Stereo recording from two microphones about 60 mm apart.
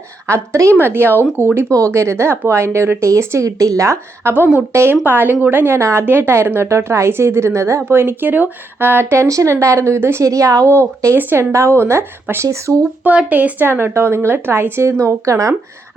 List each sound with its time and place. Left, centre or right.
0.3 s a woman's voice: right
0.8 s speech: right
1.9 s a woman's voice: right
7.9 s a woman's voice: right
10.2 s a woman's voice: right
11.2 s speech: right
11.5 s a woman's voice: right
13.1 s a woman's voice: right